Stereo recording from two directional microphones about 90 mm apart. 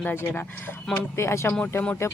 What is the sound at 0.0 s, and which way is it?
Speech, 25° left (ahead or behind).